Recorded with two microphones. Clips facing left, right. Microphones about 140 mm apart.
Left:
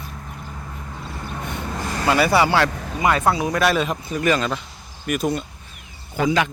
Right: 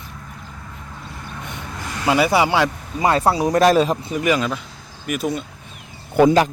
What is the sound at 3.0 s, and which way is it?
Speech, 35° right (ahead or behind).